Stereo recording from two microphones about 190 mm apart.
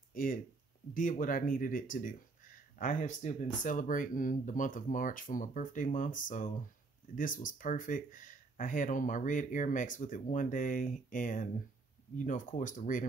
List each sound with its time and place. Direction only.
0.1 s speech: 45° left (ahead or behind)